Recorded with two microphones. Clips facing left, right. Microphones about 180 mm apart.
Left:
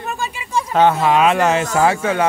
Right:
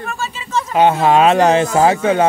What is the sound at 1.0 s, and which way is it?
Speech, 30° right (ahead or behind).